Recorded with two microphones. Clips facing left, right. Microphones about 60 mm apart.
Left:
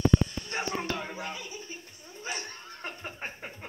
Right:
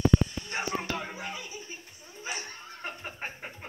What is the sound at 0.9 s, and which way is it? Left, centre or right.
Music, centre.